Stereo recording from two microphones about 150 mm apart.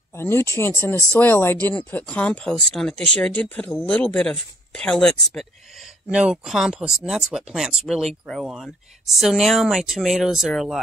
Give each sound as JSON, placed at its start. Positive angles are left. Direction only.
{"t": 0.1, "sound": "speech", "side_deg": 15}